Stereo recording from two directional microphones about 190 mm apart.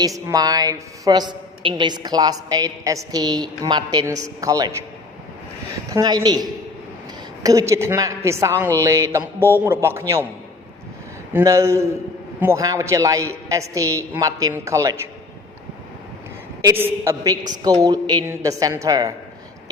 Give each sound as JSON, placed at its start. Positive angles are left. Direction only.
{"t": 0.0, "sound": "a woman's voice", "side_deg": -20}
{"t": 5.9, "sound": "a woman's voice", "side_deg": -20}
{"t": 11.3, "sound": "a woman's voice", "side_deg": -15}
{"t": 16.6, "sound": "a woman's voice", "side_deg": -10}